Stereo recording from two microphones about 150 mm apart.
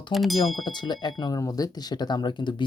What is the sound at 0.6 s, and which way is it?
Speech, 30° left (ahead or behind).